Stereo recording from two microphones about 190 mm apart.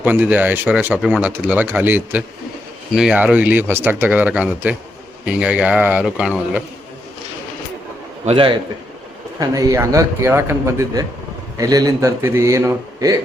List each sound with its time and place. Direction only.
0.0 s speech: 10° right (ahead or behind)
8.2 s a man's voice: 30° right (ahead or behind)
9.4 s speech: 20° right (ahead or behind)